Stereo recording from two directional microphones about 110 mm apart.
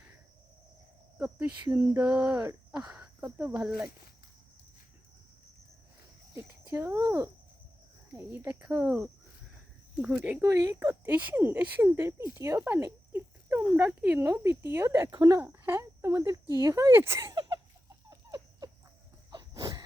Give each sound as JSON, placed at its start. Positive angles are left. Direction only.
{"t": 1.2, "sound": "speech", "side_deg": -15}
{"t": 6.3, "sound": "speech", "side_deg": -25}
{"t": 10.0, "sound": "speech", "side_deg": -10}
{"t": 10.4, "sound": "speech", "side_deg": -30}
{"t": 10.8, "sound": "speech", "side_deg": -20}
{"t": 14.0, "sound": "speech", "side_deg": -10}
{"t": 14.3, "sound": "speech", "side_deg": -20}
{"t": 15.1, "sound": "speech", "side_deg": -40}
{"t": 15.4, "sound": "speech", "side_deg": -20}
{"t": 17.3, "sound": "a sound", "side_deg": -45}
{"t": 18.1, "sound": "a sound", "side_deg": -30}